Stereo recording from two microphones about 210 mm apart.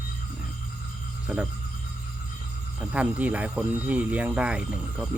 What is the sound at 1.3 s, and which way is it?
Speech, centre (ahead or behind).